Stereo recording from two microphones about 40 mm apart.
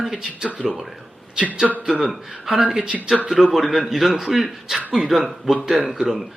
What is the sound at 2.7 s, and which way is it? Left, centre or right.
Speech, right.